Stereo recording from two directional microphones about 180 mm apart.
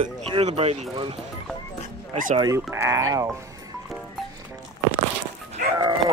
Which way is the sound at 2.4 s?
15° right (ahead or behind).